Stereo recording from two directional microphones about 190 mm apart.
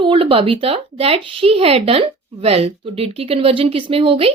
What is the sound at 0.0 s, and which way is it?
Speech, 30° right (ahead or behind).